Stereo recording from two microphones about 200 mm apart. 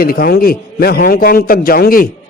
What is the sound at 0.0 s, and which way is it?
A man's voice, 50° left (ahead or behind).